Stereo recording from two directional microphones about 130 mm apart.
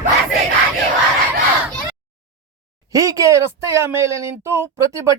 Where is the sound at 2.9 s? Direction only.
25° right (ahead or behind).